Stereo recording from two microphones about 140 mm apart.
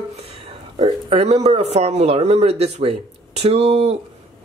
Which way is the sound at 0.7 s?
50° right (ahead or behind).